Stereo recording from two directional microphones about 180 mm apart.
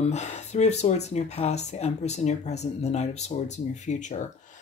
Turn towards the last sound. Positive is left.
turn(degrees=40)  # may be behind; listen again after turning